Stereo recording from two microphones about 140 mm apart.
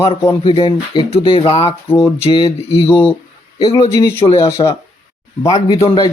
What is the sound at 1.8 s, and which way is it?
Speech, 15° left (ahead or behind).